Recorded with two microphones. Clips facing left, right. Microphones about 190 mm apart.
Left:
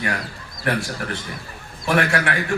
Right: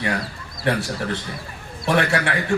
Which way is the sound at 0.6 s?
30° right (ahead or behind).